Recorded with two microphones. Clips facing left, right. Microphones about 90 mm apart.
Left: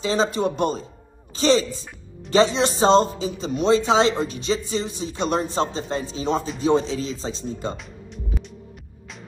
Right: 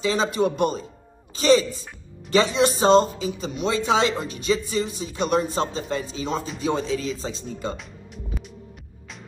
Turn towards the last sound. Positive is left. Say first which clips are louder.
# left 2 dB
turn(degrees=30)  # may be behind; listen again after turning